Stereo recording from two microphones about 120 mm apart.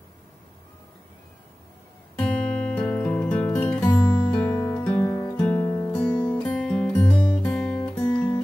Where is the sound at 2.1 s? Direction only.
10° left (ahead or behind).